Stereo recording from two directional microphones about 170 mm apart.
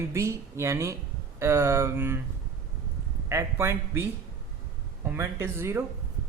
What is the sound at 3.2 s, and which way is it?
Speech, 15° right (ahead or behind).